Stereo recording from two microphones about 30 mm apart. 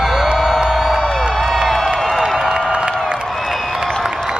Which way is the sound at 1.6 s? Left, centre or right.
Centre.